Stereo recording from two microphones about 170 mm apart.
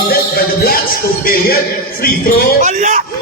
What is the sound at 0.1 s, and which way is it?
Music, 60° left (ahead or behind).